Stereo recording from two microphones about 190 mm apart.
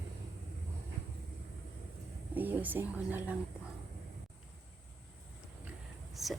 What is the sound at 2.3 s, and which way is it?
Speech, 10° right (ahead or behind).